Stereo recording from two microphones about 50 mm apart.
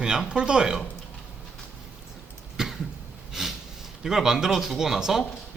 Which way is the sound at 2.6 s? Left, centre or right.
Centre.